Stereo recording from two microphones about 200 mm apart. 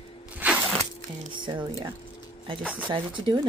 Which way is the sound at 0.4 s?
10° right (ahead or behind).